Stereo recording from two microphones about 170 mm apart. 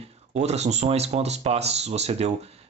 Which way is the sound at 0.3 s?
40° right (ahead or behind).